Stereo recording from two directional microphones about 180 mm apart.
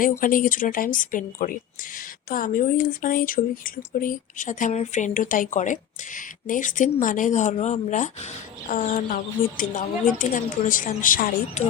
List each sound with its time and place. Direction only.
0.2 s speech: 50° left (ahead or behind)